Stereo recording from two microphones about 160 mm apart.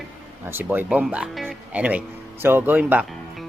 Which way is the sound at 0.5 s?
10° right (ahead or behind).